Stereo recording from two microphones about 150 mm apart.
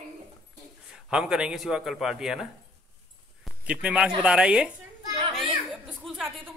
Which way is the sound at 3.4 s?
5° right (ahead or behind).